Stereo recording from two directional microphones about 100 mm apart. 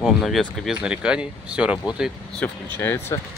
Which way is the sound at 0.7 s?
10° right (ahead or behind).